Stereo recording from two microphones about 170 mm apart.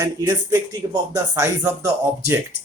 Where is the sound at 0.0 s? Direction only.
20° right (ahead or behind).